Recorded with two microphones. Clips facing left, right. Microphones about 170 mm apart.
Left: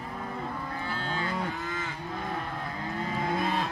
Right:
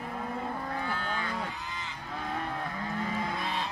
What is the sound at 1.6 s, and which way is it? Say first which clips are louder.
Moo: left 5 dB; 50° left (ahead or behind).